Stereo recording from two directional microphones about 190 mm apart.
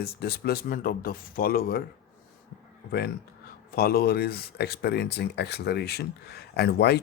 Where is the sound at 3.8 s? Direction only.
50° left (ahead or behind).